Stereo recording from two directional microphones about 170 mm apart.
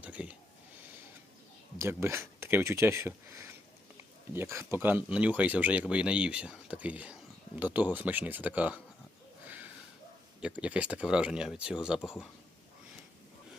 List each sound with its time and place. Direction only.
0.0 s a sound: 10° right (ahead or behind)
1.8 s speech: 15° right (ahead or behind)
10.4 s speech: 5° right (ahead or behind)